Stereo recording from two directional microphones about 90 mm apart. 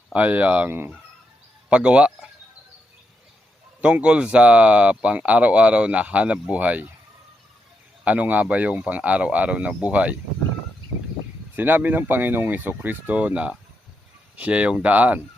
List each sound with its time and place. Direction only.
0.1 s speech: 15° right (ahead or behind)
3.8 s speech: 15° right (ahead or behind)
8.0 s speech: 15° right (ahead or behind)
11.5 s speech: 20° right (ahead or behind)